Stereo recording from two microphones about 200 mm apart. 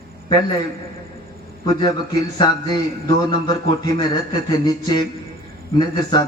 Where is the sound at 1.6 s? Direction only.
20° left (ahead or behind).